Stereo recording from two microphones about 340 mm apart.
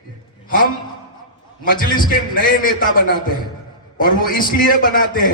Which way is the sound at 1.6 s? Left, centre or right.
Left.